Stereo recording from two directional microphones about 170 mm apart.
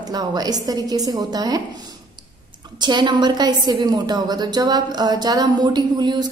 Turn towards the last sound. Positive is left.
turn(degrees=-25)  # may be behind; listen again after turning